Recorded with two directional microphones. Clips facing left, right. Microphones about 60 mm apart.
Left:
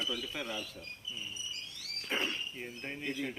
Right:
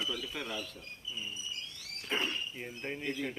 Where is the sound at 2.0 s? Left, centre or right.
Centre.